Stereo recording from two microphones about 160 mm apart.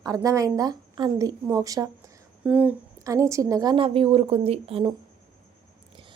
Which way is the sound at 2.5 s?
10° right (ahead or behind).